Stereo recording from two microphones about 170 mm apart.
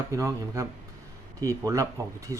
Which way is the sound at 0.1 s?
20° right (ahead or behind).